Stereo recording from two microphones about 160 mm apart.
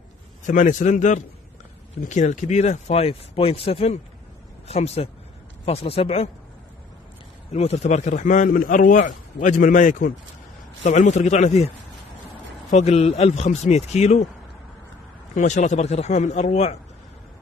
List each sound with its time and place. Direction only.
0.5 s speech: 55° left (ahead or behind)
7.5 s speech: 40° left (ahead or behind)
12.7 s speech: 45° left (ahead or behind)
15.3 s speech: 50° left (ahead or behind)